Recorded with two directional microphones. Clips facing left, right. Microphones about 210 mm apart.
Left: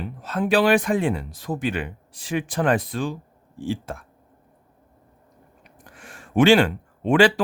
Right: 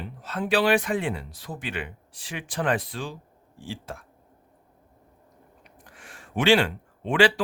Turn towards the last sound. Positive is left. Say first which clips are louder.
# left 4 dB
turn(degrees=45)  # may be behind; listen again after turning